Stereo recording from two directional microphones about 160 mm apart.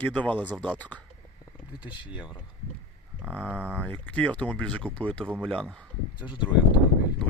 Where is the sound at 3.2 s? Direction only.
10° right (ahead or behind).